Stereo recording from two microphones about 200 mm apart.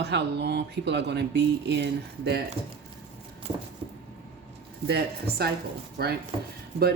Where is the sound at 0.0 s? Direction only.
55° right (ahead or behind).